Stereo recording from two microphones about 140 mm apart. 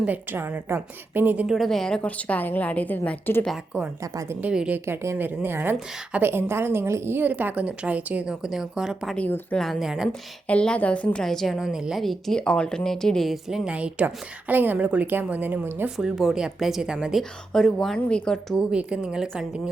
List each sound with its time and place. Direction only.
0.0 s a woman's voice: 10° right (ahead or behind); by 3.4 s 15° left (ahead or behind)
3.4 s a woman's voice: centre (ahead or behind)
4.0 s a woman's voice: 25° right (ahead or behind)
4.4 s a woman's voice: 10° right (ahead or behind)
9.1 s a woman's voice: 10° left (ahead or behind)
10.5 s a woman's voice: 10° left (ahead or behind)
18.5 s a woman's voice: 5° right (ahead or behind)